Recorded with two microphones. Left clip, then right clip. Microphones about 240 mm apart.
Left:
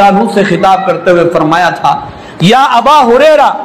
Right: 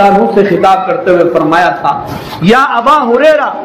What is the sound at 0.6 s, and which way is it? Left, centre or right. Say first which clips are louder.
A man's voice: even; left.